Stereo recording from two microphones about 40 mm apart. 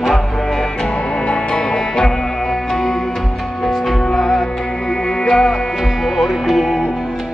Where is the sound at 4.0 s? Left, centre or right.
Centre.